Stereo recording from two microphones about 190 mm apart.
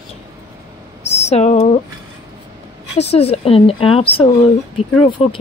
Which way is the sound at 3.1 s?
30° left (ahead or behind).